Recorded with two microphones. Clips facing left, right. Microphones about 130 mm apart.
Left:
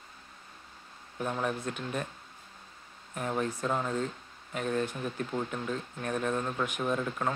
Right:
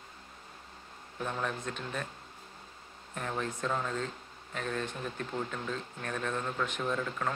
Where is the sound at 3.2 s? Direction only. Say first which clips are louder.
Left 3 dB; 10° left (ahead or behind).